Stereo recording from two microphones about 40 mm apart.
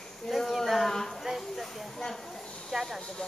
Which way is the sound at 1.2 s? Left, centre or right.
Centre.